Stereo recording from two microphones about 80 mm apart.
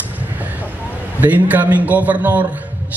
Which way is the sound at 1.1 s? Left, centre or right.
Right.